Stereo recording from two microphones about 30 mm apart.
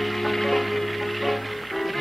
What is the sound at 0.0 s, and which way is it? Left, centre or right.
Music, centre.